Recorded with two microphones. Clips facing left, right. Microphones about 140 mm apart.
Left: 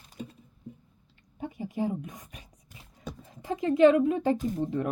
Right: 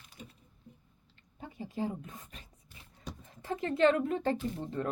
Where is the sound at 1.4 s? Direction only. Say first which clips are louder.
Left 5 dB; 15° left (ahead or behind).